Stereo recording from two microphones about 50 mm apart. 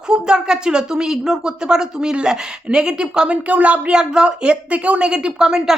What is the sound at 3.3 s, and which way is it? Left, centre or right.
Speech, right.